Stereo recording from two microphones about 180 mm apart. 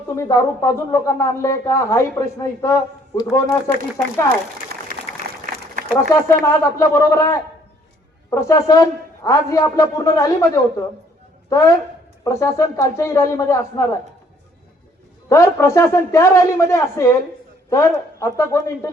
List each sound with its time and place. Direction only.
0.2 s a woman's voice: 15° left (ahead or behind)
5.9 s a woman's voice: 15° left (ahead or behind)
15.3 s a woman's voice: 15° left (ahead or behind)